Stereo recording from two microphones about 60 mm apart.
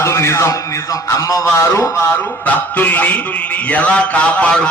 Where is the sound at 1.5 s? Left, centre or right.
Left.